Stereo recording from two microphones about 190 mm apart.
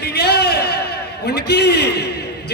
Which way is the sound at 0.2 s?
60° left (ahead or behind).